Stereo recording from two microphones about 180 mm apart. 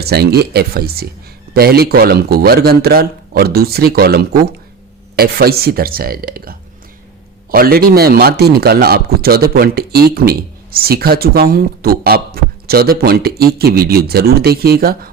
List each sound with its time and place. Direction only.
0.0 s speech: 60° right (ahead or behind)